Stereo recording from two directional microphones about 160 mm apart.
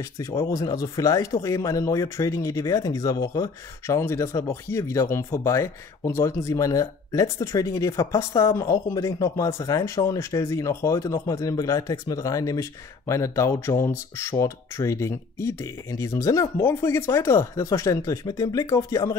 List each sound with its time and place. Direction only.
0.2 s speech: 20° left (ahead or behind)